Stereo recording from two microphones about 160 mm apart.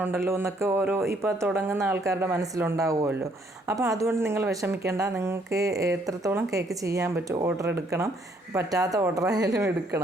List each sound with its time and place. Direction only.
0.0 s speech: 15° right (ahead or behind)